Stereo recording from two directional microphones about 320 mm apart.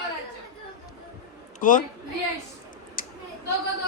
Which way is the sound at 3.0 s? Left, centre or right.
Left.